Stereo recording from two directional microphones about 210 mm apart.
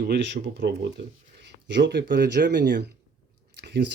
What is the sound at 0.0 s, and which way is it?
Speech, 50° right (ahead or behind).